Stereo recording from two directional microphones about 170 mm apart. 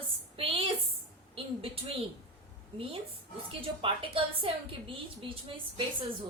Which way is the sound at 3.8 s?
30° right (ahead or behind).